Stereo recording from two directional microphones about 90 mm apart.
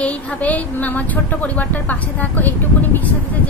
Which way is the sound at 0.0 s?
15° left (ahead or behind).